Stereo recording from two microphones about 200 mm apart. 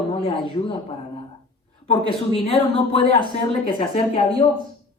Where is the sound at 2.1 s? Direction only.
30° left (ahead or behind).